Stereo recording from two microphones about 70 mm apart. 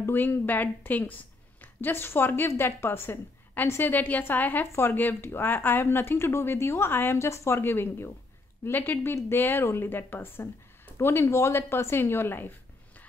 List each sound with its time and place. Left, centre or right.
0.0 s a woman's voice: left